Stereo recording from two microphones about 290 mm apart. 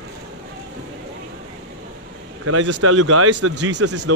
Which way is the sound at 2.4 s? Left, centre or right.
Right.